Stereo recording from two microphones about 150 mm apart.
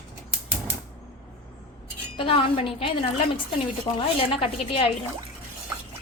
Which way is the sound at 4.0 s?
40° left (ahead or behind).